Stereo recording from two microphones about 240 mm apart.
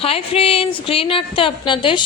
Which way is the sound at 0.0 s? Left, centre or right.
Left.